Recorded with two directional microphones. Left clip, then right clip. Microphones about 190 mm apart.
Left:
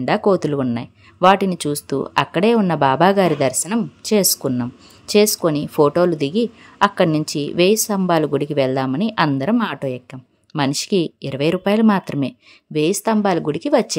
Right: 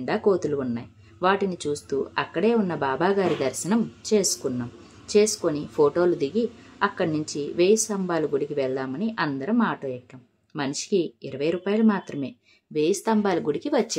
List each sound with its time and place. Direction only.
0.0 s speech: 45° left (ahead or behind)